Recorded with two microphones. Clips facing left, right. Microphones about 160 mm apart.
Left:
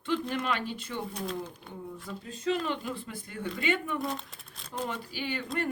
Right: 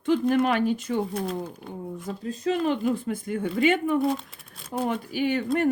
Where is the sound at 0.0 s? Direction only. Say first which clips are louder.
Right 9 dB; 45° right (ahead or behind).